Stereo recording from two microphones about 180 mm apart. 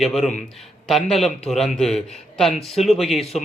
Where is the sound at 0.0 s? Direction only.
Centre (ahead or behind).